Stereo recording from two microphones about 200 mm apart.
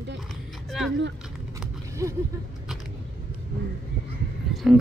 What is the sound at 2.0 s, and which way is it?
Speech, 15° right (ahead or behind).